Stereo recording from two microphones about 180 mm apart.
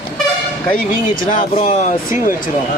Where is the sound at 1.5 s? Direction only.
35° left (ahead or behind).